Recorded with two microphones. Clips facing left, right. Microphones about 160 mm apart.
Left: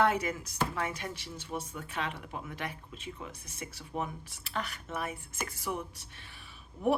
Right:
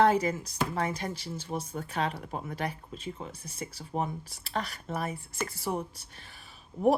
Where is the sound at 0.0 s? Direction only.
30° right (ahead or behind).